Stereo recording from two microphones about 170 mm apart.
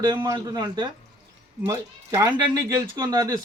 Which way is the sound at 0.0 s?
20° right (ahead or behind).